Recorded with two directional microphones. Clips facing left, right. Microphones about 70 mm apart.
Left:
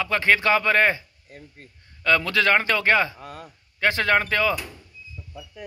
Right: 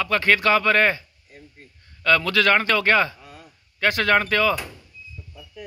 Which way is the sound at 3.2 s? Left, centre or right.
Left.